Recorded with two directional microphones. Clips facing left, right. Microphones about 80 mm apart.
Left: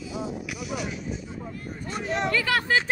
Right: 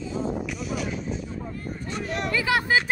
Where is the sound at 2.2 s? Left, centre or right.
Centre.